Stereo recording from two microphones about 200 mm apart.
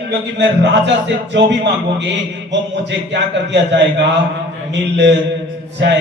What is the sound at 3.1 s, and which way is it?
Speech, 60° right (ahead or behind).